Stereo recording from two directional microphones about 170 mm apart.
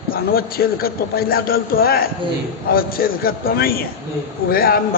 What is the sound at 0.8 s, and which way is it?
A man's voice, 65° left (ahead or behind).